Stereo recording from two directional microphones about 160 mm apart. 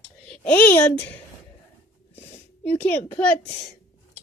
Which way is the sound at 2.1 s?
15° left (ahead or behind).